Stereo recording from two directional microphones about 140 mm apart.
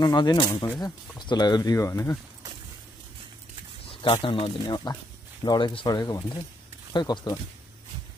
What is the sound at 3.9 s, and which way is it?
Speech, 40° left (ahead or behind).